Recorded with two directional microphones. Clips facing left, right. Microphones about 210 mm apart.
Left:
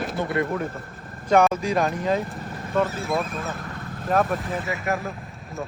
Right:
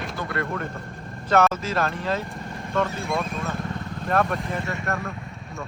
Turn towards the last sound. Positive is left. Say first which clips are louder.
# left 2 dB
turn(degrees=0)  # may be behind; listen again after turning